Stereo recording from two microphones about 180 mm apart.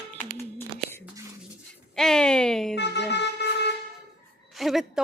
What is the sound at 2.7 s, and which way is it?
Vehicle, 70° left (ahead or behind).